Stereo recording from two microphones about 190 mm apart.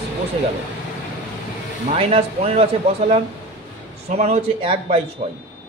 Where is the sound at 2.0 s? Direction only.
30° right (ahead or behind).